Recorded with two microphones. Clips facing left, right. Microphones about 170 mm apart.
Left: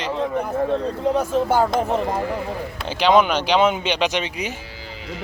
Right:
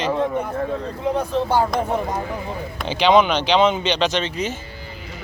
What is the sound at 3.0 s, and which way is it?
Speech, 5° left (ahead or behind).